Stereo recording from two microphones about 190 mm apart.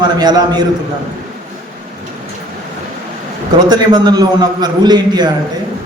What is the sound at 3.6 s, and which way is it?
A man's voice, 20° right (ahead or behind).